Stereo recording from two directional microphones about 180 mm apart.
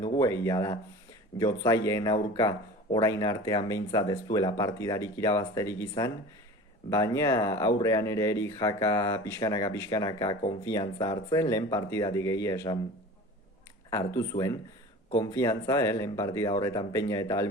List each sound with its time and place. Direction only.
0.0 s speech: 20° left (ahead or behind)
6.9 s speech: 15° left (ahead or behind)
13.9 s speech: 15° left (ahead or behind)